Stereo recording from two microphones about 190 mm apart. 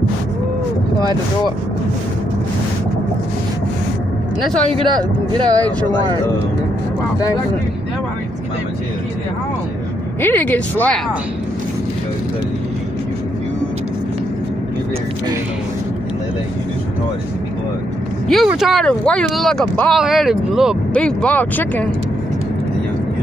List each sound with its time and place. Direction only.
4.7 s speech: 25° right (ahead or behind)
10.2 s speech: 10° left (ahead or behind)
18.3 s speech: centre (ahead or behind)